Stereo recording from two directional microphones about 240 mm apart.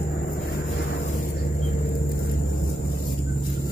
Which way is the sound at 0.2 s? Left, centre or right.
Left.